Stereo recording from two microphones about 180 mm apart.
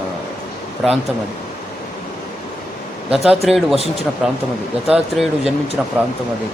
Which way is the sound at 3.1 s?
Centre (ahead or behind).